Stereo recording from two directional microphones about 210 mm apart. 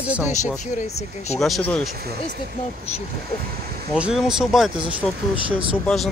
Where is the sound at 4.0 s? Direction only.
5° right (ahead or behind).